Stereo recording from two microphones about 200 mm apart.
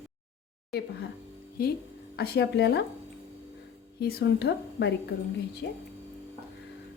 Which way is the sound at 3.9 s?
50° left (ahead or behind).